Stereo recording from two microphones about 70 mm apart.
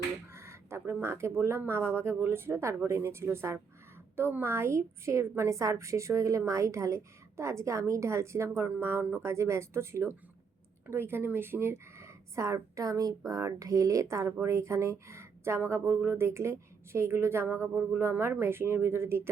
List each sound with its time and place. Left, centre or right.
0.3 s a sound: right
1.0 s a woman's voice: right
9.2 s a woman's voice: right